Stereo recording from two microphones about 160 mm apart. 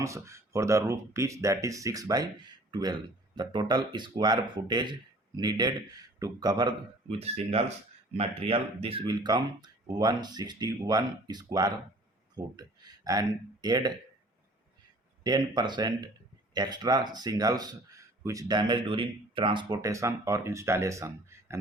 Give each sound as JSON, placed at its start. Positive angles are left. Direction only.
{"t": 0.0, "sound": "speech", "side_deg": -20}
{"t": 15.2, "sound": "speech", "side_deg": -25}